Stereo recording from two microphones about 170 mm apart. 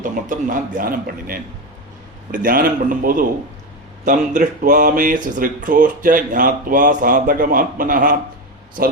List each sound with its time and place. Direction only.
0.0 s speech: 50° right (ahead or behind)